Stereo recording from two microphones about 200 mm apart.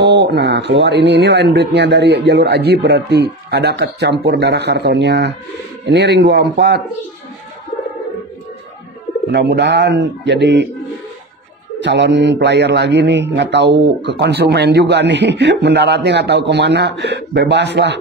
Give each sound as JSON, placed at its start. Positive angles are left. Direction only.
{"t": 0.0, "sound": "speech", "side_deg": -60}
{"t": 9.3, "sound": "speech", "side_deg": -60}
{"t": 11.8, "sound": "speech", "side_deg": -60}